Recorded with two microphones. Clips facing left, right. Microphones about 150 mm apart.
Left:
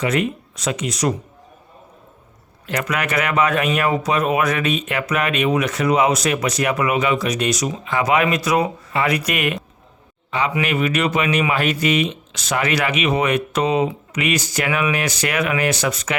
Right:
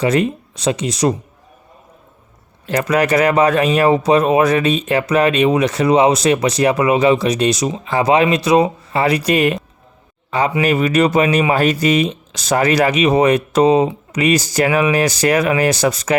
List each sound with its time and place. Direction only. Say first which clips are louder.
0.0 s speech: right 5 dB; 35° right (ahead or behind)
2.6 s speech: right 7 dB; 35° right (ahead or behind)